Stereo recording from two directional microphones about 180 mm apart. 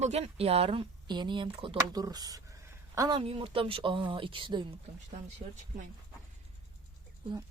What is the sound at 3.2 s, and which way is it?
Speech, 30° right (ahead or behind).